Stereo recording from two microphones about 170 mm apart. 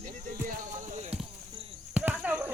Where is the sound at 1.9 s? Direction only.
5° right (ahead or behind).